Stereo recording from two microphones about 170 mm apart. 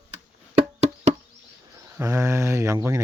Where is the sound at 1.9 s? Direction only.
15° right (ahead or behind).